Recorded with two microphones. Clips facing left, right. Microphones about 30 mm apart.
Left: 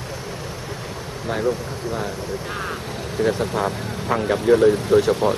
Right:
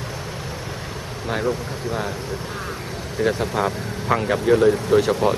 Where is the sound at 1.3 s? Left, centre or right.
Centre.